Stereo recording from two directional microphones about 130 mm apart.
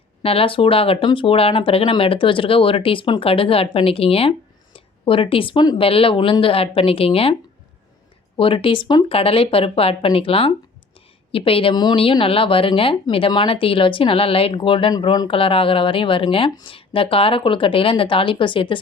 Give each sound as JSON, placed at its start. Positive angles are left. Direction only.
{"t": 0.2, "sound": "speech", "side_deg": 45}
{"t": 8.4, "sound": "speech", "side_deg": 45}
{"t": 11.7, "sound": "speech", "side_deg": 35}